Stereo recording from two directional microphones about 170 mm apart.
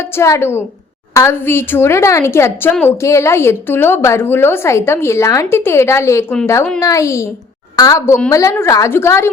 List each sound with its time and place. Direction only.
0.2 s a woman's voice: 15° left (ahead or behind)